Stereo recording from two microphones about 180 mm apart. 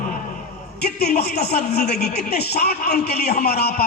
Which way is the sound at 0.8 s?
65° left (ahead or behind).